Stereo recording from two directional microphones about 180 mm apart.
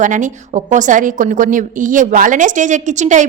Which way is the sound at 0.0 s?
45° right (ahead or behind).